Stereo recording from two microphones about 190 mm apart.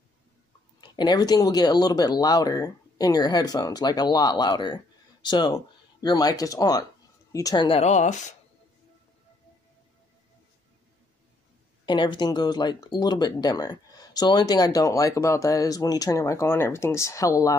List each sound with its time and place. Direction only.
0.7 s speech: 20° left (ahead or behind); by 8.4 s 40° left (ahead or behind)
11.8 s speech: 25° left (ahead or behind)